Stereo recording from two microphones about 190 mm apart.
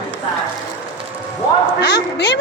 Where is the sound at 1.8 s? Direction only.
60° left (ahead or behind).